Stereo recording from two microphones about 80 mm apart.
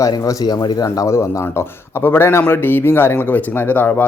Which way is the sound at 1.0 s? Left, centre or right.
Left.